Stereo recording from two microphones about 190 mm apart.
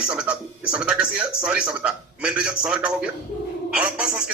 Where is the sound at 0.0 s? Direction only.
5° right (ahead or behind).